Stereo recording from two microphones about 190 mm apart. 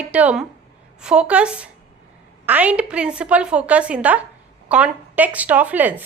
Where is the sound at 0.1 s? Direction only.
5° right (ahead or behind).